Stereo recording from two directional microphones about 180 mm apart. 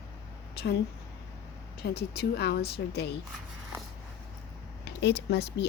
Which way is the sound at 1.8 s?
65° left (ahead or behind).